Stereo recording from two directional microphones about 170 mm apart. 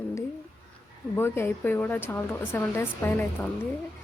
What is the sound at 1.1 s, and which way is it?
Speech, 15° left (ahead or behind).